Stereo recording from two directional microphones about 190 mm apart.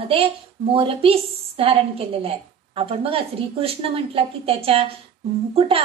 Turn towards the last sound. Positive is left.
turn(degrees=-30)  # may be behind; listen again after turning